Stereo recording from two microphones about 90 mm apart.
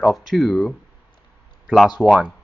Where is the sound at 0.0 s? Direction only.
Centre (ahead or behind).